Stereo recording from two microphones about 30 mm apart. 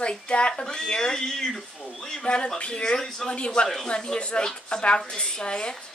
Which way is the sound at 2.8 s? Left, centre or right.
Centre.